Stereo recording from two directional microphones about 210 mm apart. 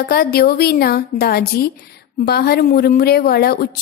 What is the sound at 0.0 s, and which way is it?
A woman's voice, 45° left (ahead or behind).